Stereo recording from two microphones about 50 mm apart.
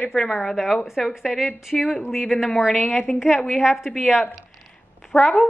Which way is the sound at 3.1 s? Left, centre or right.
Centre.